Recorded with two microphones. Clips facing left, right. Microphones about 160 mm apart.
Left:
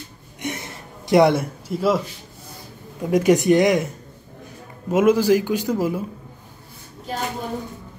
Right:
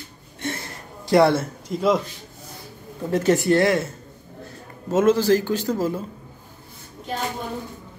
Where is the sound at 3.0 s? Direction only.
15° left (ahead or behind).